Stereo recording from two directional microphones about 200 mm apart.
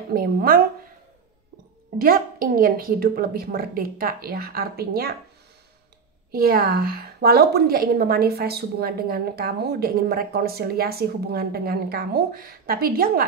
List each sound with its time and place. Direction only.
0.1 s a woman's voice: 50° right (ahead or behind)
2.0 s a woman's voice: 45° right (ahead or behind)
6.3 s a woman's voice: 50° right (ahead or behind)